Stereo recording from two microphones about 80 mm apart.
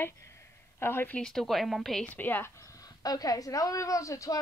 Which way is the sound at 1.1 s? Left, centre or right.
Centre.